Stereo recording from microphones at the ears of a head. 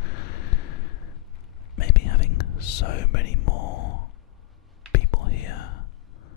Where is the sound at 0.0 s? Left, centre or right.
Left.